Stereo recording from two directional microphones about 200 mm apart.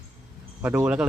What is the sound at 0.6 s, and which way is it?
Speech, 10° right (ahead or behind).